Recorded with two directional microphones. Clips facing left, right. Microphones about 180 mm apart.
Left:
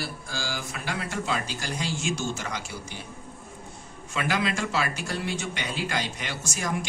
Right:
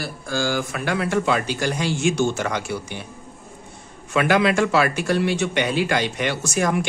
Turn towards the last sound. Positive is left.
turn(degrees=-70)  # may be behind; listen again after turning